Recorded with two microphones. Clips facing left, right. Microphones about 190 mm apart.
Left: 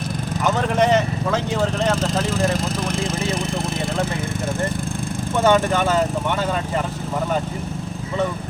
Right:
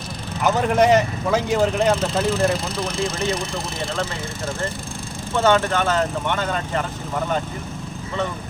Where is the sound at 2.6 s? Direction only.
50° left (ahead or behind).